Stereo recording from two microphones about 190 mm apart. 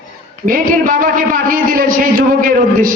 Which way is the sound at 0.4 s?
45° right (ahead or behind).